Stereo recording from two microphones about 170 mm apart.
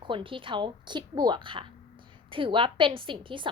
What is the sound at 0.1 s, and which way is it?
A woman's voice, 30° right (ahead or behind).